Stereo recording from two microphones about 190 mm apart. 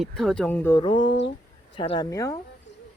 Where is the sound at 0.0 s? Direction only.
Centre (ahead or behind).